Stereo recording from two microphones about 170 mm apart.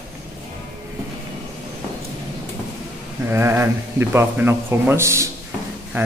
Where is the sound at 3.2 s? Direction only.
15° right (ahead or behind).